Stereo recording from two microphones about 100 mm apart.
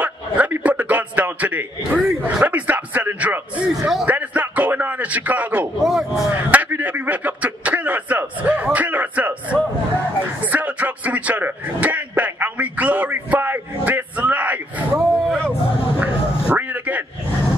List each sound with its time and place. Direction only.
0.0 s a man's voice: 15° right (ahead or behind)
5.9 s speech: 5° right (ahead or behind)
6.3 s speech: 15° right (ahead or behind)
10.4 s a sound: 15° right (ahead or behind)
15.0 s a sound: centre (ahead or behind)
16.0 s music: 15° right (ahead or behind)